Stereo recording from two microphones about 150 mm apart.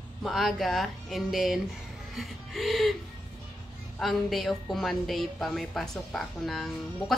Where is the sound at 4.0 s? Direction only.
Centre (ahead or behind).